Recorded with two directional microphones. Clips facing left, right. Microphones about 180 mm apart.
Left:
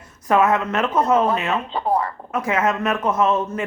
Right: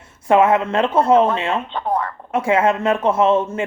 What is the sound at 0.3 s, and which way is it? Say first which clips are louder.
A man's voice: right 3 dB; 25° right (ahead or behind).